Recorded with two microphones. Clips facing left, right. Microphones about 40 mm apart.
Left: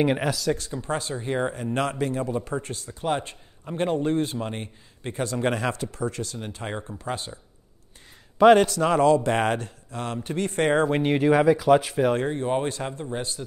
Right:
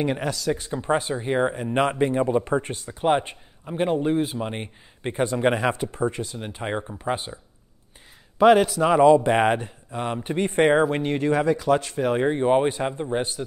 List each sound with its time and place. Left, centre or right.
0.0 s speech: centre
0.3 s speech: centre
0.6 s speech: right
3.6 s a man's voice: centre
4.6 s speech: right
8.4 s a man's voice: centre
10.9 s speech: centre
12.2 s speech: right